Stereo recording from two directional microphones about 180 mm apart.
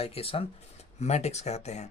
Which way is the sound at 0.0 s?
35° left (ahead or behind).